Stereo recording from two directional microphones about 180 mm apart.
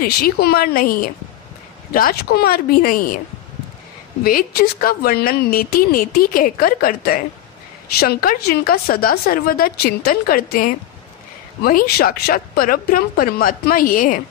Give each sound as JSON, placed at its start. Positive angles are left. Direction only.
{"t": 0.0, "sound": "speech", "side_deg": 60}
{"t": 4.2, "sound": "speech", "side_deg": 55}